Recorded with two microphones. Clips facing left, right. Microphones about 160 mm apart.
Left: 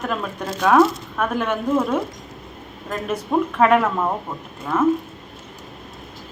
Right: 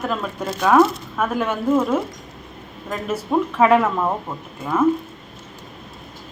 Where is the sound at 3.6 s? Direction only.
Centre (ahead or behind).